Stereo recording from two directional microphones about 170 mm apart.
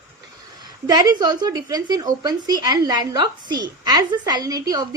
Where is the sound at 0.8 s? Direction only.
25° right (ahead or behind).